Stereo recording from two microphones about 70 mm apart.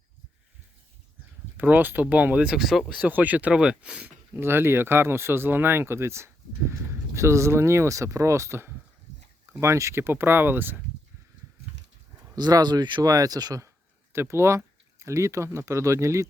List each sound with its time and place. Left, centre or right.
1.5 s speech: right
2.6 s speech: centre
3.0 s speech: right
4.4 s speech: right
12.4 s speech: right
14.1 s speech: right